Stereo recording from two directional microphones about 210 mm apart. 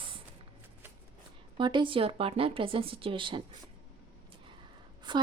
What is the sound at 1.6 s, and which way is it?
Speech, 20° right (ahead or behind).